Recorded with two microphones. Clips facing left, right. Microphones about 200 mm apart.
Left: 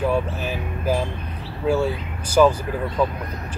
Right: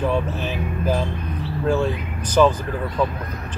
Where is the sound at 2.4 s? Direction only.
5° left (ahead or behind).